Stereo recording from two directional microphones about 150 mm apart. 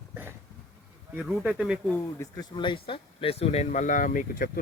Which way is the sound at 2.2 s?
25° left (ahead or behind).